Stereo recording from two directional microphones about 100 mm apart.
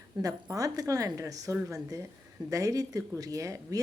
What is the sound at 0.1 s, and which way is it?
Speech, 35° right (ahead or behind).